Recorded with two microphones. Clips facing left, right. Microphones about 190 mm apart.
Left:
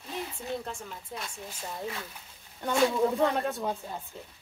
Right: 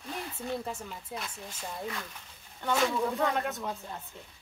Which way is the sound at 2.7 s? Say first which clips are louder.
Left 3 dB; 10° left (ahead or behind).